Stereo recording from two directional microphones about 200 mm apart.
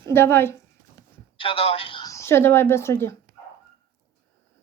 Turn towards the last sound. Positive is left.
turn(degrees=15)  # may be behind; listen again after turning